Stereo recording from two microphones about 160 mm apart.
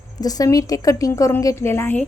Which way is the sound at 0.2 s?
25° left (ahead or behind).